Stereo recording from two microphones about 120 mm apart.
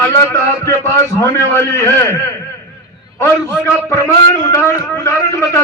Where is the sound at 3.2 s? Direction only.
20° left (ahead or behind).